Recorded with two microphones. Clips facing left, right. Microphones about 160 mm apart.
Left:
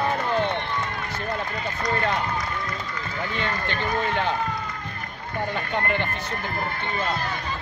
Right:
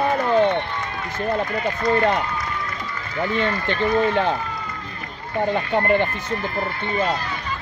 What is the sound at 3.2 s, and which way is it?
Speech, 35° right (ahead or behind).